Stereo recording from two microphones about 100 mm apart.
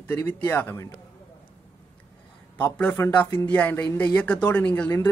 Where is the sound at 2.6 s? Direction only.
15° left (ahead or behind).